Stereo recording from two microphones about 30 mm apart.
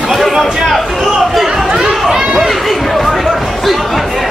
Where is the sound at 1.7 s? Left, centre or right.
Centre.